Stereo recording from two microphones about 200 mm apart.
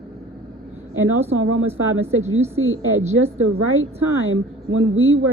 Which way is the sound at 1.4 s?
90° right.